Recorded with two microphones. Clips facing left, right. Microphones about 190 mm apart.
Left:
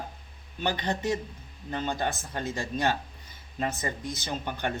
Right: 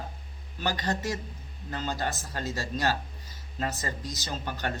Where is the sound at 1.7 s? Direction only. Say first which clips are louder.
Left 2 dB; 15° left (ahead or behind).